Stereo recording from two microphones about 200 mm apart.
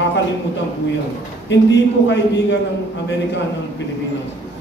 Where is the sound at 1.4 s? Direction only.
60° left (ahead or behind).